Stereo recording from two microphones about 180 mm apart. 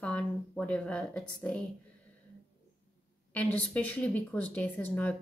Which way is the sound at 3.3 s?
10° left (ahead or behind).